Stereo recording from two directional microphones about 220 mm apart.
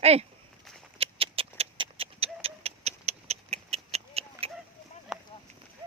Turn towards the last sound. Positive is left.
turn(degrees=0)  # may be behind; listen again after turning